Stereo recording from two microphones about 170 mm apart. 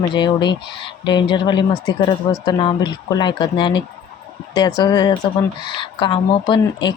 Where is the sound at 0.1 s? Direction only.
25° left (ahead or behind).